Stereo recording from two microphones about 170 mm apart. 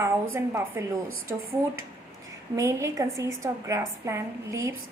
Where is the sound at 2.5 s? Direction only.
20° right (ahead or behind).